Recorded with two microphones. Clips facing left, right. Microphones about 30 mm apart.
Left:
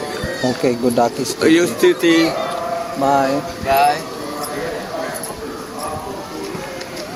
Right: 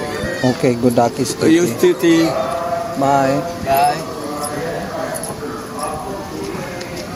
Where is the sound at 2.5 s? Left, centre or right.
Centre.